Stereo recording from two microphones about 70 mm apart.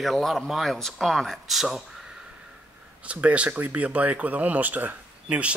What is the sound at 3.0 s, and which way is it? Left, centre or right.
Speech, centre.